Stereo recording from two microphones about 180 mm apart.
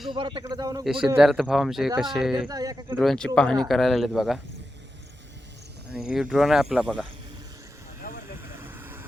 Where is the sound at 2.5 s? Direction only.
20° right (ahead or behind).